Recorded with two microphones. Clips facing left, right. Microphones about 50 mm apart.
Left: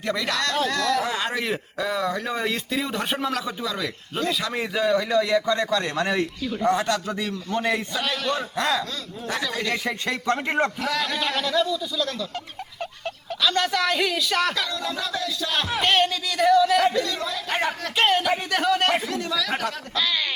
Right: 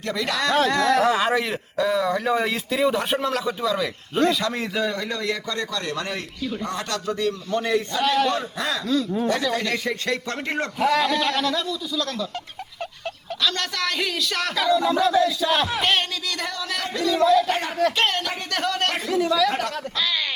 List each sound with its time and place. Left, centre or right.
0.1 s a man's voice: centre
5.3 s a man's voice: centre
7.9 s a man's voice: centre
10.8 s a sound: centre
11.1 s speech: centre
13.4 s speech: centre
14.6 s a sound: centre
15.5 s speech: centre